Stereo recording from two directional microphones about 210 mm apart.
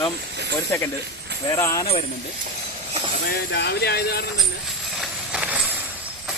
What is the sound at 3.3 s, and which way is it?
Speech, 50° left (ahead or behind).